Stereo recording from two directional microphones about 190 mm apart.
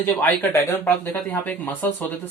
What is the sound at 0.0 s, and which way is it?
Speech, 10° left (ahead or behind).